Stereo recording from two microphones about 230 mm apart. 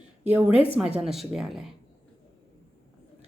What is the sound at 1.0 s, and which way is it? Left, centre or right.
Speech, centre.